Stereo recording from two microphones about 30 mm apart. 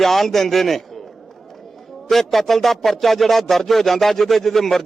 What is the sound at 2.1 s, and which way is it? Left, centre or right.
Speech, centre.